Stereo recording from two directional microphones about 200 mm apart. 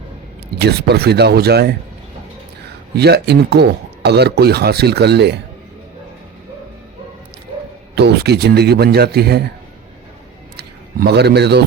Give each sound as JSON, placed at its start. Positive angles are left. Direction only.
{"t": 0.6, "sound": "speech", "side_deg": -55}
{"t": 2.9, "sound": "speech", "side_deg": -55}
{"t": 7.9, "sound": "speech", "side_deg": -55}
{"t": 10.6, "sound": "a man's voice", "side_deg": -55}